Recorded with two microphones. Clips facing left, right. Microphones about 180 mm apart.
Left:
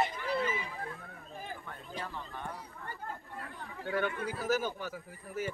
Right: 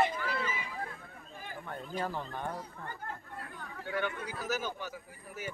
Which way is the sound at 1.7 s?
35° right (ahead or behind).